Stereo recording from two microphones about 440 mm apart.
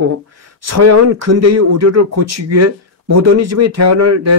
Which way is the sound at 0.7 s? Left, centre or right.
Right.